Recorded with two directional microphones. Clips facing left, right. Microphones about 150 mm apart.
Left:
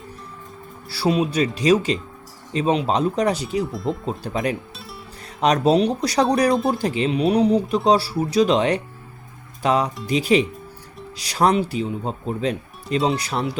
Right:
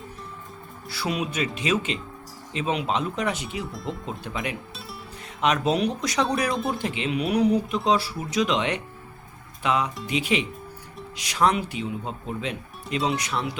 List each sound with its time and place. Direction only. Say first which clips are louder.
0.9 s speech: left 8 dB; 30° left (ahead or behind)
3.7 s speech: left 7 dB; centre (ahead or behind)
4.0 s speech: left 7 dB; 35° left (ahead or behind)